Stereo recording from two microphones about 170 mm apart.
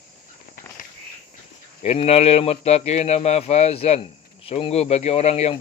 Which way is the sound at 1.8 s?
35° left (ahead or behind).